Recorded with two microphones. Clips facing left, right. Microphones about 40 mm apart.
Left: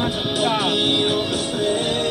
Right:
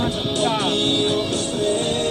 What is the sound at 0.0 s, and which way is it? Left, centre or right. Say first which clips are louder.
Music: even; centre.